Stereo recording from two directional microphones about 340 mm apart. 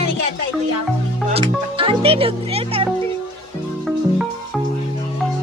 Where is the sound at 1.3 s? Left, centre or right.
Centre.